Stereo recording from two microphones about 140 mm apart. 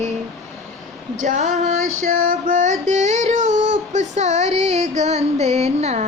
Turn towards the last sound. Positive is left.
turn(degrees=-50)  # may be behind; listen again after turning